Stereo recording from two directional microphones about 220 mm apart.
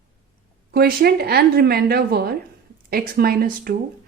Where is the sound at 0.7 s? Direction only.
45° right (ahead or behind).